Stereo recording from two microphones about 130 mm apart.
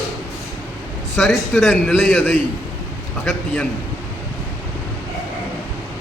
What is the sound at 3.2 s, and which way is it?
Speech, 10° left (ahead or behind).